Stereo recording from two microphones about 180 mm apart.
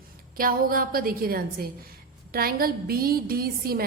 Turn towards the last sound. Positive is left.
turn(degrees=-55)  # may be behind; listen again after turning